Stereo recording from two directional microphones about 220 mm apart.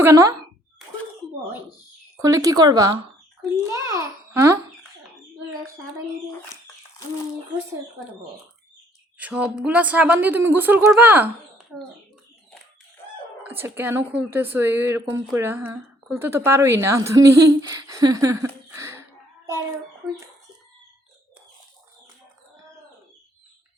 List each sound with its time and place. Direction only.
0.0 s a woman's voice: 15° right (ahead or behind)
2.1 s a woman's voice: 15° right (ahead or behind)
3.7 s babbling: 15° right (ahead or behind)
9.1 s a woman's voice: 5° right (ahead or behind)
13.4 s a woman's voice: 10° right (ahead or behind)